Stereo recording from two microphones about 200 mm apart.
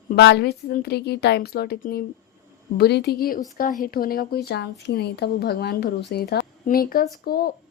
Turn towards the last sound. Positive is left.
turn(degrees=45)  # may be behind; listen again after turning